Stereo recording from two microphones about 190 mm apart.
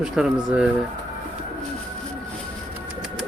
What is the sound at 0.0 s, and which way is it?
Speech, 5° right (ahead or behind).